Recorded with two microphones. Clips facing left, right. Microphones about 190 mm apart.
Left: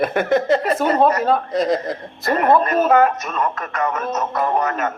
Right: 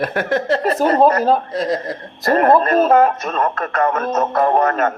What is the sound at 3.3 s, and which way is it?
A man's voice, 55° right (ahead or behind).